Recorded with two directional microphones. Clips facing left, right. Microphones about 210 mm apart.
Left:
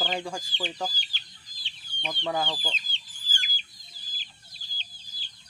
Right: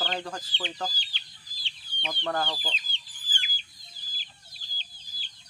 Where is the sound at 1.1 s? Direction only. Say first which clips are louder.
Even; 45° left (ahead or behind).